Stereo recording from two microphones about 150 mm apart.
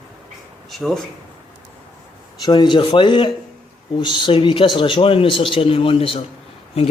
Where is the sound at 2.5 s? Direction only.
30° left (ahead or behind).